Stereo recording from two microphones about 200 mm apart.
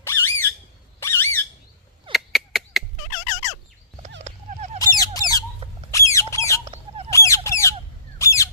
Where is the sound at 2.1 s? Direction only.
Centre (ahead or behind).